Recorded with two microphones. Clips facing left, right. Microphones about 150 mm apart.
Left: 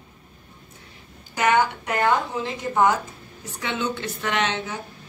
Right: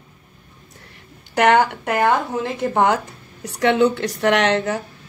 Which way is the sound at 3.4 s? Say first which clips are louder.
Right 12 dB; 75° right (ahead or behind).